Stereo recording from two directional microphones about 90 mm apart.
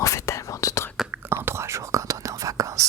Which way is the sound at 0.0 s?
35° left (ahead or behind).